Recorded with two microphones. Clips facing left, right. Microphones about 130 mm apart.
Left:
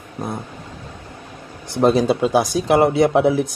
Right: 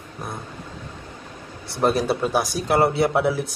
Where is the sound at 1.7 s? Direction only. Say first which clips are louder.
Left 5 dB; 20° left (ahead or behind).